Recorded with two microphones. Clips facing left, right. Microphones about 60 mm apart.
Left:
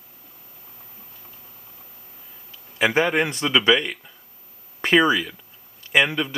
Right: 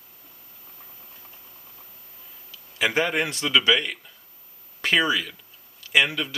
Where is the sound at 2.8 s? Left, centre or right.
Centre.